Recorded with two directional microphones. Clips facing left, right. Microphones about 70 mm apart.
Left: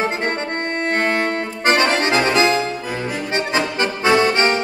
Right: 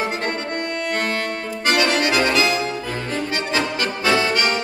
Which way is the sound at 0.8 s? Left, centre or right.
Left.